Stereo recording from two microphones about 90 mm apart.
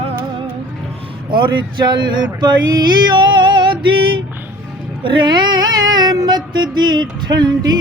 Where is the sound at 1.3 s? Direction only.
60° right (ahead or behind).